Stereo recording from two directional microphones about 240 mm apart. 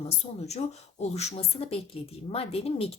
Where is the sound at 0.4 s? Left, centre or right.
Left.